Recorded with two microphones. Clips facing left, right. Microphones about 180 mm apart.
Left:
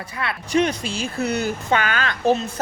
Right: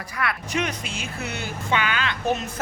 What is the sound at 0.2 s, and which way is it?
Speech, 30° left (ahead or behind).